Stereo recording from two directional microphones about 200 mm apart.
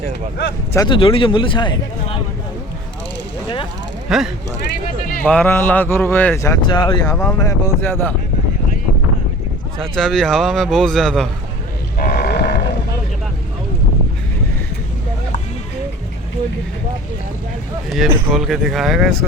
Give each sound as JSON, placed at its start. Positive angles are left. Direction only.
{"t": 0.7, "sound": "speech", "side_deg": 20}
{"t": 4.1, "sound": "speech", "side_deg": 0}
{"t": 9.9, "sound": "speech", "side_deg": 0}
{"t": 11.9, "sound": "livestock", "side_deg": 50}
{"t": 17.8, "sound": "speech", "side_deg": 0}